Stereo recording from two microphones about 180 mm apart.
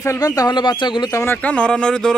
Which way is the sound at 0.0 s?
15° left (ahead or behind).